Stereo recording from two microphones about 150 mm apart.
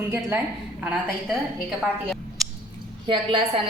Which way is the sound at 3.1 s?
40° right (ahead or behind).